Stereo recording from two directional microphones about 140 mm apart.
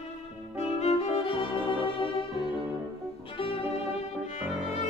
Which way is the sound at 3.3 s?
45° left (ahead or behind).